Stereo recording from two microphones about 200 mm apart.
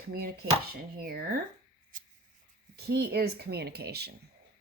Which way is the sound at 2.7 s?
50° right (ahead or behind).